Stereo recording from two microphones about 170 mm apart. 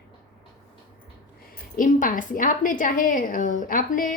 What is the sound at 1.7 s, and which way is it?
A woman's voice, 50° left (ahead or behind).